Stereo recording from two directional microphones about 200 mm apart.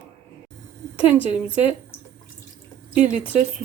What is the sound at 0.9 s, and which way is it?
Speech, 5° right (ahead or behind).